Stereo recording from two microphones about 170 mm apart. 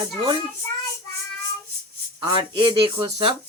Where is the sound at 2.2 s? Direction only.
30° right (ahead or behind).